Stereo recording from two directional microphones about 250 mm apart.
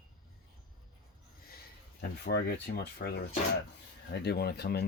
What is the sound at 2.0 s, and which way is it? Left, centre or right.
Speech, left.